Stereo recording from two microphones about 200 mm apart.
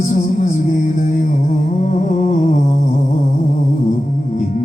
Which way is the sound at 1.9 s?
40° left (ahead or behind).